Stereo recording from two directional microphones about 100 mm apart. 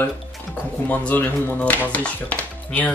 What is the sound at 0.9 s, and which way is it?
Speech, 15° left (ahead or behind).